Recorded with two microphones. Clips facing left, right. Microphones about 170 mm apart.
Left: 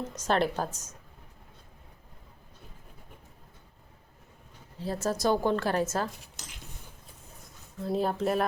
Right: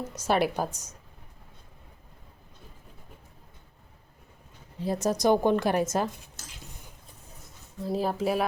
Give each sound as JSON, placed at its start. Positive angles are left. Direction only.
{"t": 0.0, "sound": "a woman's voice", "side_deg": -10}
{"t": 4.8, "sound": "a woman's voice", "side_deg": -15}
{"t": 7.8, "sound": "speech", "side_deg": 0}